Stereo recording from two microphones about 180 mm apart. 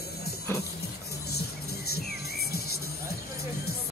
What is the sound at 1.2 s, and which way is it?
Music, 60° left (ahead or behind).